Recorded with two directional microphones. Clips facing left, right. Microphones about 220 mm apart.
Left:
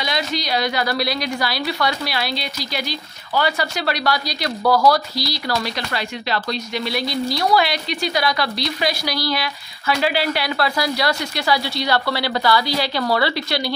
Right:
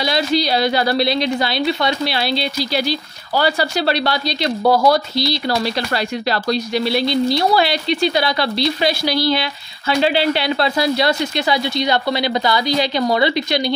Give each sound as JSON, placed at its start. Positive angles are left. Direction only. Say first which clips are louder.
{"t": 0.0, "sound": "speech", "louder": "right 6 dB", "side_deg": -30}
{"t": 5.9, "sound": "speech", "louder": "right 4 dB", "side_deg": -35}